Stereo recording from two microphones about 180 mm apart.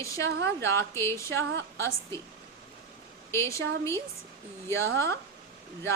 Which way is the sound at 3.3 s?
15° left (ahead or behind).